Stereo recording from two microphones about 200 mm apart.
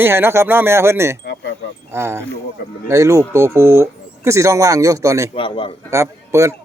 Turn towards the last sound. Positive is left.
turn(degrees=-15)  # may be behind; listen again after turning